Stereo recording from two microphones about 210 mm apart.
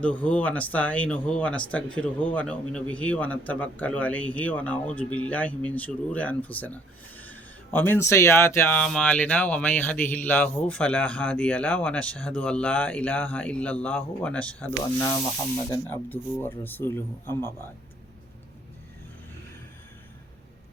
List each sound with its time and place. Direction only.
0.0 s speech: 5° left (ahead or behind)
15.7 s speech: 10° left (ahead or behind)